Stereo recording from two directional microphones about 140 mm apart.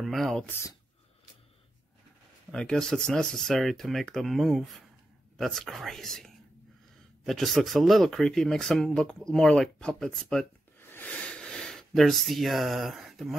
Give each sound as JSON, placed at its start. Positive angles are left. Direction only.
{"t": 0.0, "sound": "speech", "side_deg": 0}
{"t": 0.5, "sound": "speech", "side_deg": 20}
{"t": 2.5, "sound": "speech", "side_deg": 5}
{"t": 10.8, "sound": "a sound", "side_deg": 15}